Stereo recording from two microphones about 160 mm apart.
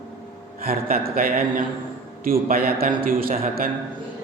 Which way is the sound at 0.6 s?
70° right (ahead or behind).